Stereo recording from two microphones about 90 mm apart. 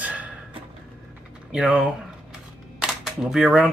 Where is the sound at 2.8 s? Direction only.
5° right (ahead or behind).